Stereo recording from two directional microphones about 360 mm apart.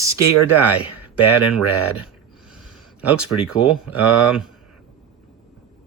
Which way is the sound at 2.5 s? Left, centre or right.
Centre.